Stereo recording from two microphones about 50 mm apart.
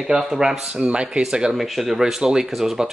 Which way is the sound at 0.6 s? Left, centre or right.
Centre.